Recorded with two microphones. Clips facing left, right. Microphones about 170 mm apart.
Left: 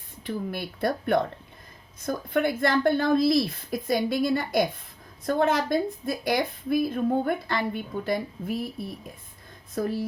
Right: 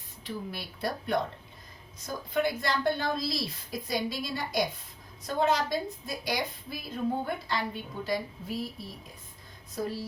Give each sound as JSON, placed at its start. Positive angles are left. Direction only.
{"t": 0.3, "sound": "a woman's voice", "side_deg": 55}